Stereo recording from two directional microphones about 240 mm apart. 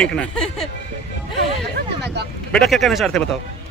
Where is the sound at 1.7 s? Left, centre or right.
Right.